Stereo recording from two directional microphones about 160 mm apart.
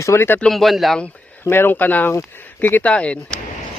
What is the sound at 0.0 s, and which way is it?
Speech, 15° left (ahead or behind).